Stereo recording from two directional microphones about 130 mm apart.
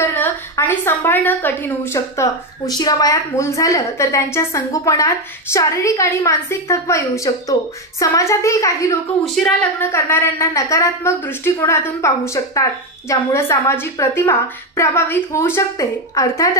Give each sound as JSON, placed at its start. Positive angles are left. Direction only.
{"t": 0.0, "sound": "a woman's voice", "side_deg": 15}
{"t": 9.2, "sound": "a woman's voice", "side_deg": 5}
{"t": 9.8, "sound": "a woman's voice", "side_deg": 15}